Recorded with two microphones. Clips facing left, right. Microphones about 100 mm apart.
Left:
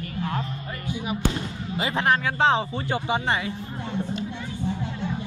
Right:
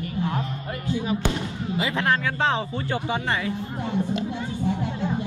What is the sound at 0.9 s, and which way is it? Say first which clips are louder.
Speech: right 2 dB; 15° left (ahead or behind).